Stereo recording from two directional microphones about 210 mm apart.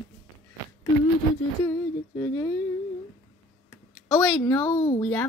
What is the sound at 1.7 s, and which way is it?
Speech, 10° left (ahead or behind).